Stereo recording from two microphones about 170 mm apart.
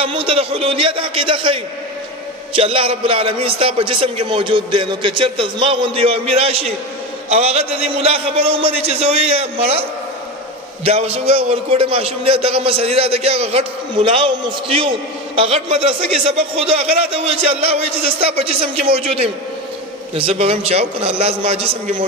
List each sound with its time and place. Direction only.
0.0 s a man's voice: 30° right (ahead or behind)